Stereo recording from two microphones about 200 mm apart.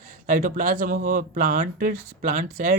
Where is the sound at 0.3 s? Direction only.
40° right (ahead or behind).